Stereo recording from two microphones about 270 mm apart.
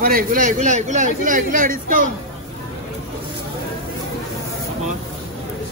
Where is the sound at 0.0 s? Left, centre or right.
Right.